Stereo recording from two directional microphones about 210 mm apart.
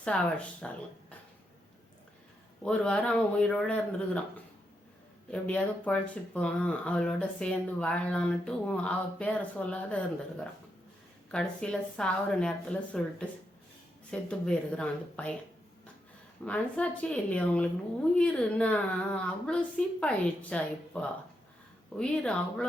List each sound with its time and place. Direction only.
0.0 s speech: 5° left (ahead or behind)
2.6 s speech: 5° left (ahead or behind)
5.3 s speech: 5° left (ahead or behind)
11.3 s speech: 5° left (ahead or behind)
16.5 s speech: 5° left (ahead or behind)